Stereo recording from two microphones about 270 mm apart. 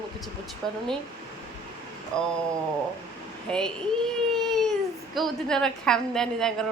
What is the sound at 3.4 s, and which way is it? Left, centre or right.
Speech, centre.